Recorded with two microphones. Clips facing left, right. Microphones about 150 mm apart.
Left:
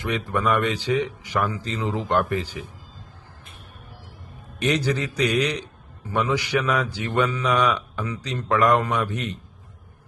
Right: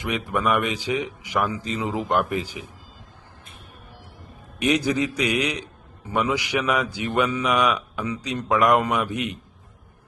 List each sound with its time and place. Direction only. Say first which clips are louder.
0.0 s a man's voice: even; 15° right (ahead or behind)
4.6 s a man's voice: right 2 dB; 10° right (ahead or behind)